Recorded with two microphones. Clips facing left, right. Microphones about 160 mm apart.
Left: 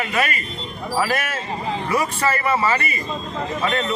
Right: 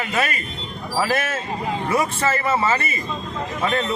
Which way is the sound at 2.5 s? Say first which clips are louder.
Even; 25° right (ahead or behind).